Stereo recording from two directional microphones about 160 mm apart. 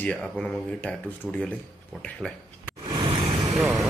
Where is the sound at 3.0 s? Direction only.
30° right (ahead or behind).